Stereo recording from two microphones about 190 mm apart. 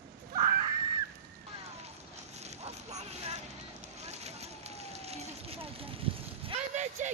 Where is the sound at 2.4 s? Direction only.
35° right (ahead or behind).